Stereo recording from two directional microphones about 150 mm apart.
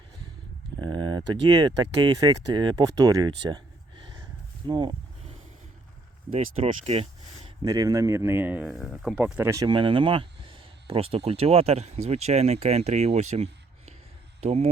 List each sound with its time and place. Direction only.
0.8 s speech: 30° right (ahead or behind)
6.3 s speech: 45° right (ahead or behind)
7.6 s speech: 25° right (ahead or behind)
8.7 s speech: centre (ahead or behind); by 9.6 s 15° right (ahead or behind)
9.6 s speech: 35° right (ahead or behind)